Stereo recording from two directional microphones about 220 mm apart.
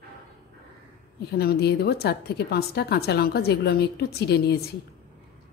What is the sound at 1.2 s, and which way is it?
A woman's voice, 45° left (ahead or behind).